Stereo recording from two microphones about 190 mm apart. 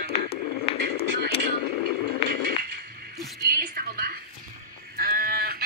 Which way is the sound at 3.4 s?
50° right (ahead or behind).